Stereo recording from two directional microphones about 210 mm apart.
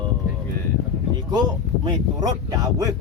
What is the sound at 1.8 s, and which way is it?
Speech, 20° right (ahead or behind).